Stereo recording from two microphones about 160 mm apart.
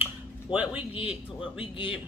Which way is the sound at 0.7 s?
35° left (ahead or behind).